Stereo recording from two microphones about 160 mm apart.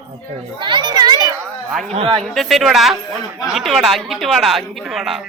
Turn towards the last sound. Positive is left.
turn(degrees=0)  # may be behind; listen again after turning